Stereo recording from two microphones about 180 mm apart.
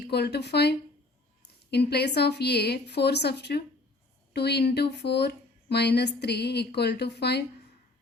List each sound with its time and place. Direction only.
0.0 s speech: 65° left (ahead or behind)